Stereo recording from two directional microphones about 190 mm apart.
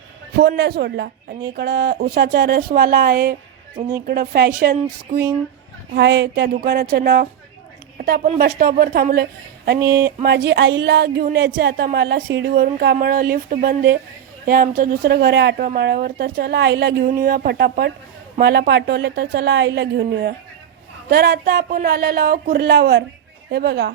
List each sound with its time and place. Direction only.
0.3 s a woman's voice: 60° right (ahead or behind)
5.9 s a woman's voice: 65° right (ahead or behind)
9.8 s speech: 15° right (ahead or behind)
10.2 s a woman's voice: 60° right (ahead or behind)
17.1 s a woman's voice: 50° right (ahead or behind)